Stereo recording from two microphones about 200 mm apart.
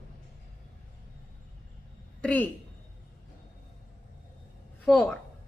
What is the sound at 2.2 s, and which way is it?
Speech, 5° left (ahead or behind).